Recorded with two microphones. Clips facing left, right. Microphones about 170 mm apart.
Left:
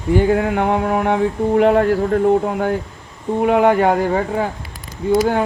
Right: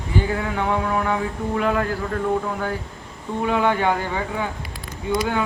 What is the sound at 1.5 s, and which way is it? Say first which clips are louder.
A man's voice: left 9 dB; 30° left (ahead or behind).